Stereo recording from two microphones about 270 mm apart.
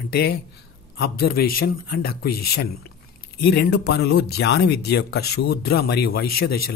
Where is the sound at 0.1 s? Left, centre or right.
Left.